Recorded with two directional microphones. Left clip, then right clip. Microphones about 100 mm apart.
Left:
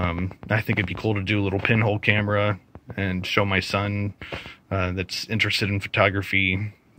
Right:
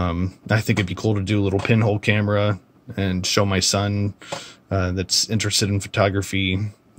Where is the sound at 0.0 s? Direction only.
45° right (ahead or behind).